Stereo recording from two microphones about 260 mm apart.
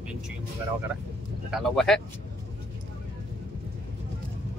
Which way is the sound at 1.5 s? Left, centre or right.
Centre.